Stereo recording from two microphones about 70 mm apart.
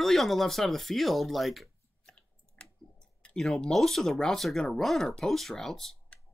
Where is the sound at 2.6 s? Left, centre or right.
Centre.